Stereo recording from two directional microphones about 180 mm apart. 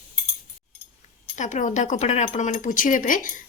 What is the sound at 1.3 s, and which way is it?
Speech, 45° left (ahead or behind).